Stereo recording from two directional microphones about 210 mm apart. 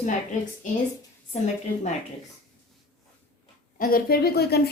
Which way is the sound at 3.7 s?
45° left (ahead or behind).